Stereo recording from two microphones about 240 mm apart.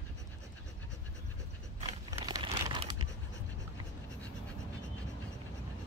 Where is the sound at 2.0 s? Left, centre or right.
Centre.